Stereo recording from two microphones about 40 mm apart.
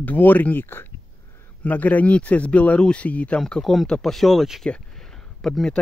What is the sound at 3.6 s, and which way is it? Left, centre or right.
Speech, centre.